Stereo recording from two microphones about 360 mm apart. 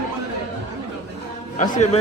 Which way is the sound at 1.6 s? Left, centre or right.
Centre.